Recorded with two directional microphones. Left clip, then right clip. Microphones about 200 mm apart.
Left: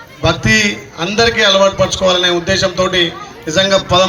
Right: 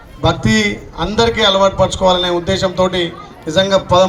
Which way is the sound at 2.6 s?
65° right (ahead or behind).